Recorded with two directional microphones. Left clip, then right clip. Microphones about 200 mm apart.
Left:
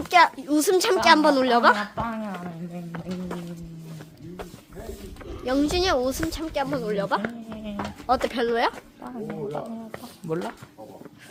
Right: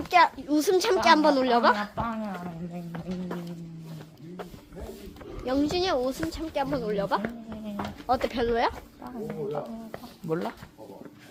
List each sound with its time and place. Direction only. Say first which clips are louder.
0.0 s a woman's voice: left 3 dB; 10° left (ahead or behind)
5.5 s a woman's voice: left 3 dB; 10° left (ahead or behind)
7.2 s a sound: left 3 dB; 10° left (ahead or behind)
10.2 s speech: left 1 dB; 15° right (ahead or behind)